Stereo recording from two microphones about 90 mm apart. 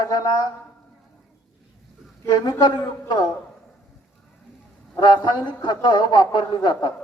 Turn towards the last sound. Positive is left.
turn(degrees=55)  # may be behind; listen again after turning